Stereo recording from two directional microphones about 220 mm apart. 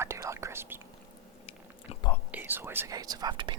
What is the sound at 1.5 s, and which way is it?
Chewing, 25° left (ahead or behind).